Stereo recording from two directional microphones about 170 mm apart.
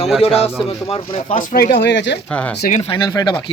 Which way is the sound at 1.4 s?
55° left (ahead or behind).